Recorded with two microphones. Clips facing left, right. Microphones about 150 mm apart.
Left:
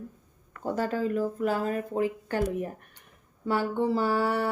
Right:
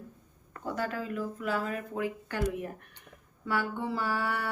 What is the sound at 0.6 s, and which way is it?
Speech, 35° left (ahead or behind).